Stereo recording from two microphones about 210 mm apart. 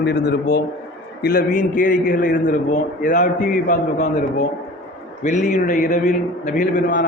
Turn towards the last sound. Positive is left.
turn(degrees=40)  # may be behind; listen again after turning